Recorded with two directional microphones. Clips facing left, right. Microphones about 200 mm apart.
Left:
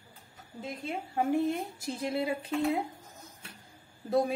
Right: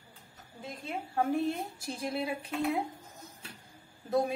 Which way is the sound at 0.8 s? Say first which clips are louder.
Left 1 dB; 15° left (ahead or behind).